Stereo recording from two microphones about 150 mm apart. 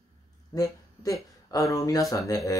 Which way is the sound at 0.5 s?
25° left (ahead or behind).